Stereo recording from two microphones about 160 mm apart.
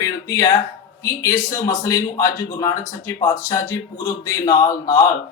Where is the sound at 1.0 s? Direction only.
20° left (ahead or behind).